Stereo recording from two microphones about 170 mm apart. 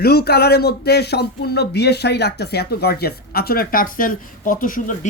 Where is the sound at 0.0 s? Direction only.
70° left (ahead or behind).